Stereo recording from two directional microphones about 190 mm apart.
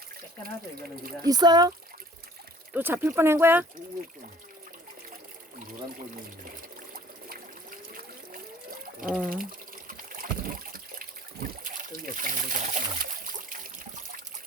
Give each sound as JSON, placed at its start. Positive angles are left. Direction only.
{"t": 0.4, "sound": "speech", "side_deg": -50}
{"t": 1.2, "sound": "speech", "side_deg": -20}
{"t": 2.7, "sound": "speech", "side_deg": -10}
{"t": 6.9, "sound": "trickle", "side_deg": -45}
{"t": 9.0, "sound": "speech", "side_deg": -5}
{"t": 9.4, "sound": "water", "side_deg": -45}